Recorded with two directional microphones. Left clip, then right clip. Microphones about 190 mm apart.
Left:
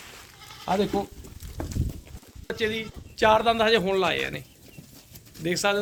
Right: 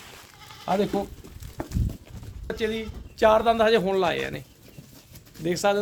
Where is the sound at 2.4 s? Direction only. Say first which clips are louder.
Even; 60° right (ahead or behind); by 4.4 s 35° right (ahead or behind).